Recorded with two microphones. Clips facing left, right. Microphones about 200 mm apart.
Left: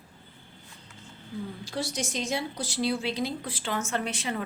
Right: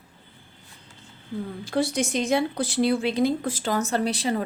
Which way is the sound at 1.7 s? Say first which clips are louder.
Right 10 dB; 55° right (ahead or behind).